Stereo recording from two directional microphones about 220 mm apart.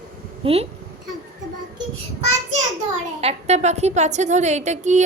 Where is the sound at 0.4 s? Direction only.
25° right (ahead or behind).